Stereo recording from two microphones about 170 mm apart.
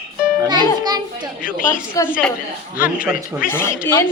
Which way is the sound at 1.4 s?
55° left (ahead or behind).